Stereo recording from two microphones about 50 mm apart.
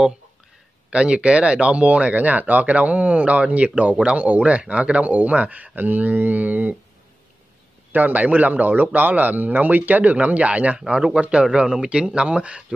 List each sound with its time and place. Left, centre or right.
0.8 s speech: right
7.9 s a man's voice: right
10.8 s speech: centre
11.1 s speech: right